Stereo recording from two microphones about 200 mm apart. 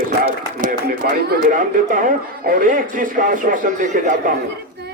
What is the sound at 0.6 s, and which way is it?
A man's voice, 45° right (ahead or behind).